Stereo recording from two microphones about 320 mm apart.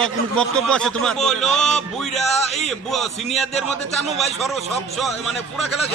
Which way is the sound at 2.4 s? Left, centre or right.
Centre.